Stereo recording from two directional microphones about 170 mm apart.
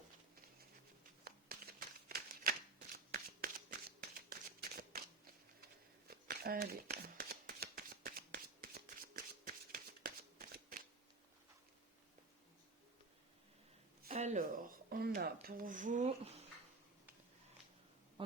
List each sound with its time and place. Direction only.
2.0 s shuffling cards: 60° right (ahead or behind)
6.1 s shuffling cards: 60° right (ahead or behind)
14.2 s a sound: 45° right (ahead or behind)